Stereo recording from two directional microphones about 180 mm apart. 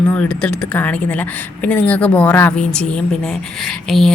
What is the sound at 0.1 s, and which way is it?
Speech, 5° left (ahead or behind).